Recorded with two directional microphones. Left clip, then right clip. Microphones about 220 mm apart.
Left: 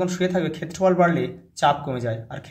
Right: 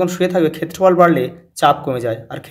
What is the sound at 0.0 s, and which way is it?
A man's voice, 30° right (ahead or behind).